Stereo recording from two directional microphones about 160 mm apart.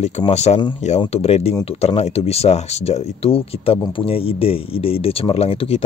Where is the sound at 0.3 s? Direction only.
45° left (ahead or behind).